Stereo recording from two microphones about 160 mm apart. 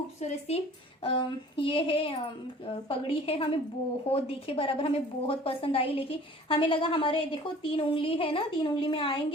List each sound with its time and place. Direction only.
0.2 s a woman's voice: 40° left (ahead or behind)